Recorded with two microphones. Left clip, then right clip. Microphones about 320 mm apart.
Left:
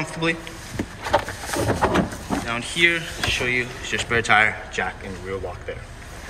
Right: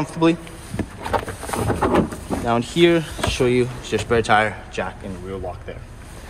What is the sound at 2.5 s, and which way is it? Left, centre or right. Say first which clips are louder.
Speech: right 3 dB; centre.